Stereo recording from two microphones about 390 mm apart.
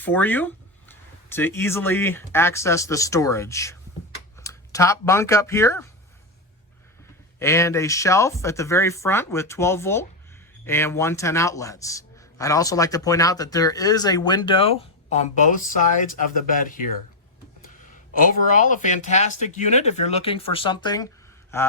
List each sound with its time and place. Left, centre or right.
0.0 s speech: centre
7.3 s a man's voice: centre
18.1 s a man's voice: centre